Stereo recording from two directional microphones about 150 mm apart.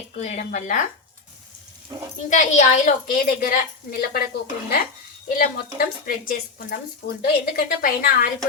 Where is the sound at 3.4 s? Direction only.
75° left (ahead or behind).